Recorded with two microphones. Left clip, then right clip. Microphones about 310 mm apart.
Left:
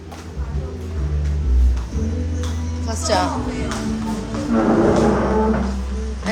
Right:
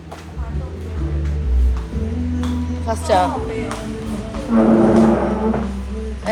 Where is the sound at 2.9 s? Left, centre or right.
Centre.